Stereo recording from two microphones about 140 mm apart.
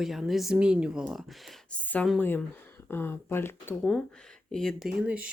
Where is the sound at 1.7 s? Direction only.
10° left (ahead or behind).